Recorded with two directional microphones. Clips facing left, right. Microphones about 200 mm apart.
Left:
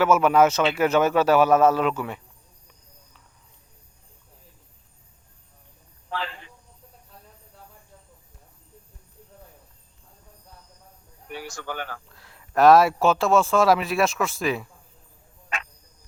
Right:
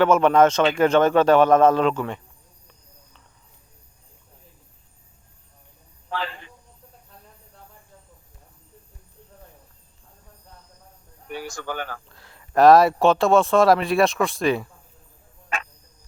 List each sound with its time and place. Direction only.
0.0 s speech: 5° left (ahead or behind)
6.1 s a sound: 55° right (ahead or behind)
11.3 s speech: 45° right (ahead or behind)
12.0 s speech: centre (ahead or behind)